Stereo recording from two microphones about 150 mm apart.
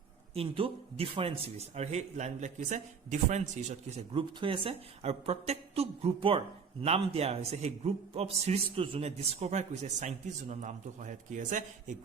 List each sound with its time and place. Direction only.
0.3 s a man's voice: 40° right (ahead or behind)
4.1 s a woman's voice: 35° right (ahead or behind); by 11.9 s 60° right (ahead or behind)